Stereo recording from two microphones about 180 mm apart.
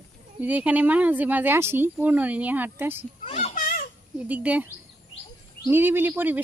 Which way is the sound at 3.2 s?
35° left (ahead or behind).